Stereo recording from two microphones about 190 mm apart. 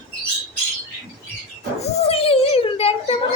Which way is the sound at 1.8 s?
30° left (ahead or behind).